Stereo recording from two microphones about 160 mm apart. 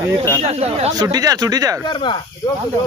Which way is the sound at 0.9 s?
25° right (ahead or behind).